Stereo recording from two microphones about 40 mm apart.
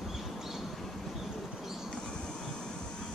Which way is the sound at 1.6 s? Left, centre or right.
Centre.